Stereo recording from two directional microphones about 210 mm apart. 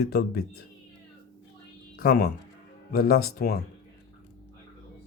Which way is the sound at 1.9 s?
45° left (ahead or behind).